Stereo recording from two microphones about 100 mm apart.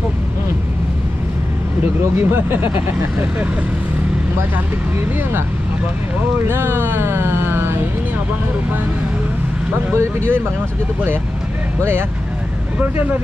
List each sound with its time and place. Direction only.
2.1 s speech: 20° right (ahead or behind)
6.4 s speech: 20° right (ahead or behind)
9.9 s speech: 25° right (ahead or behind)
12.7 s speech: 15° right (ahead or behind)